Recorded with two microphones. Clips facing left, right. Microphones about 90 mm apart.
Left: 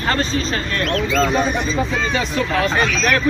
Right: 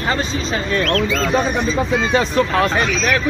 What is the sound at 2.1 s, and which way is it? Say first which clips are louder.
Speech: right 5 dB; 40° right (ahead or behind).